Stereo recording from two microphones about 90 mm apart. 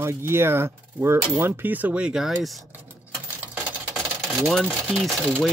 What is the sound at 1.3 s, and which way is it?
Speech, 25° right (ahead or behind).